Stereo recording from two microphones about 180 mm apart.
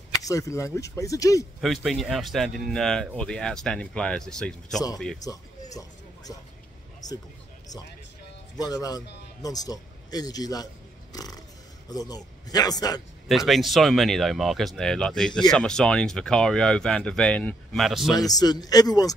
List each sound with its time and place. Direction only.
0.3 s speech: 15° left (ahead or behind)
1.6 s speech: centre (ahead or behind)
7.0 s a man's voice: 20° left (ahead or behind)
8.5 s a man's voice: 20° left (ahead or behind)
13.5 s speech: centre (ahead or behind)
18.1 s a man's voice: 20° left (ahead or behind)